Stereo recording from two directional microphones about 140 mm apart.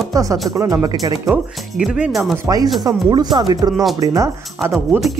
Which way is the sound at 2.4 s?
25° right (ahead or behind).